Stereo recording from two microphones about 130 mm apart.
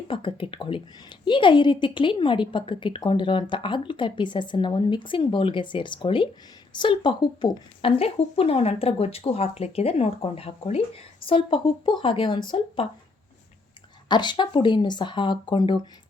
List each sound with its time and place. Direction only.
0.1 s a woman's voice: 40° left (ahead or behind)
14.1 s a woman's voice: 35° left (ahead or behind)